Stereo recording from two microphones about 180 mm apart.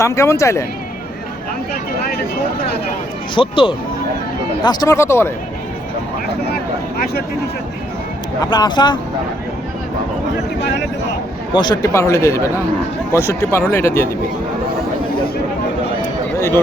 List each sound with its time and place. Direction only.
0.0 s speech: 15° left (ahead or behind)
3.3 s speech: 30° left (ahead or behind)
8.4 s speech: 25° left (ahead or behind)
11.5 s speech: 25° left (ahead or behind)